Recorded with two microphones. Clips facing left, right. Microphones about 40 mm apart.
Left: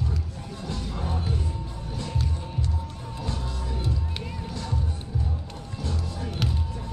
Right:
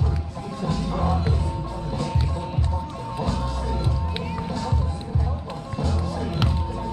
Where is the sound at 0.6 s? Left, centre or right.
Right.